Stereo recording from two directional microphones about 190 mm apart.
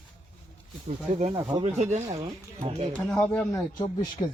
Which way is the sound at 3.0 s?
5° left (ahead or behind).